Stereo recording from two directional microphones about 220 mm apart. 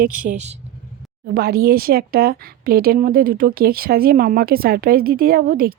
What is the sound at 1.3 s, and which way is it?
Speech, 45° right (ahead or behind).